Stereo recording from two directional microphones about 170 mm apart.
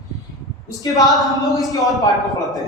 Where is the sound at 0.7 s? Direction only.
20° left (ahead or behind).